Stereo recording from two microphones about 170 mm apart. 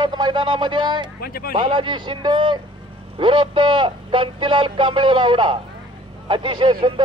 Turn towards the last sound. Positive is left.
turn(degrees=-30)  # may be behind; listen again after turning